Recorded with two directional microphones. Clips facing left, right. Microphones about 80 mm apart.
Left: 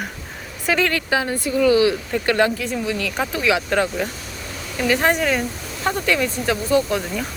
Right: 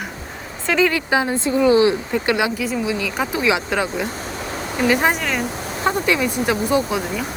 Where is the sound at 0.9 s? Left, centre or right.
Centre.